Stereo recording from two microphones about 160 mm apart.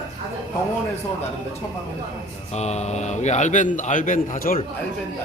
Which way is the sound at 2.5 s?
45° left (ahead or behind).